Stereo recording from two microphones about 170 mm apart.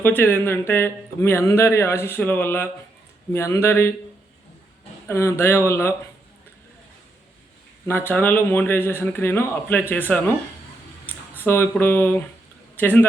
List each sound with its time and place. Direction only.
0.0 s speech: 10° left (ahead or behind)
5.0 s speech: 15° left (ahead or behind)
7.9 s speech: 10° left (ahead or behind)
11.0 s a sound: 10° left (ahead or behind)
12.7 s speech: 10° left (ahead or behind)